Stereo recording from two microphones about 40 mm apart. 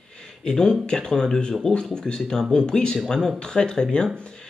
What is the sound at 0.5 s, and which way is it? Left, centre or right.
Speech, centre.